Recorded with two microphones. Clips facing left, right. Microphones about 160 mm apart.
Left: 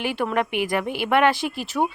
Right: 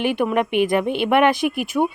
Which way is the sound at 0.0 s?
15° right (ahead or behind).